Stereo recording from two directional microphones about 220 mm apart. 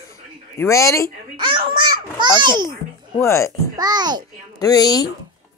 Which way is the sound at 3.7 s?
20° right (ahead or behind).